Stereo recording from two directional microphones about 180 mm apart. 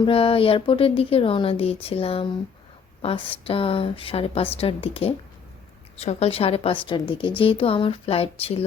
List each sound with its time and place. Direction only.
0.0 s speech: 30° left (ahead or behind)